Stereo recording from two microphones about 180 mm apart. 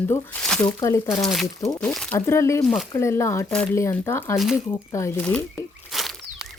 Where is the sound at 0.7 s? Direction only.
15° left (ahead or behind).